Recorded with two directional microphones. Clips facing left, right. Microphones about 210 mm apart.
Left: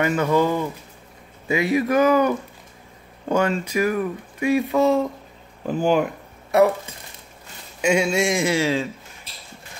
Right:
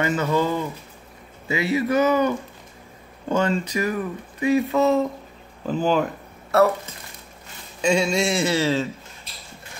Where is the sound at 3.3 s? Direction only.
10° left (ahead or behind).